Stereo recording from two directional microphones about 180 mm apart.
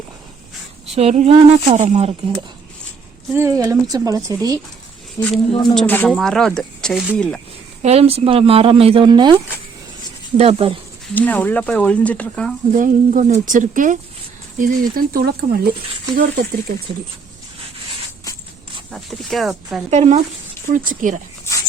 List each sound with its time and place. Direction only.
0.9 s speech: 35° right (ahead or behind)
3.3 s speech: 15° right (ahead or behind)
5.2 s speech: 15° left (ahead or behind)
7.8 s speech: 35° right (ahead or behind)
11.1 s speech: 10° left (ahead or behind)
12.7 s speech: 45° right (ahead or behind)
18.9 s speech: centre (ahead or behind)
19.9 s speech: 40° right (ahead or behind)